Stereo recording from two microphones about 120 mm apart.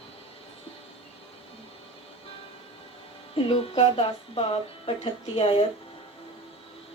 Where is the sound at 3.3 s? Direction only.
55° left (ahead or behind).